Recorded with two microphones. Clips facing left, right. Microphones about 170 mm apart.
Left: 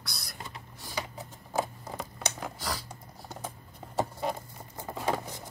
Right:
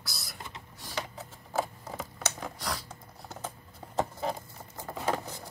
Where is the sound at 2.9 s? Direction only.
10° left (ahead or behind).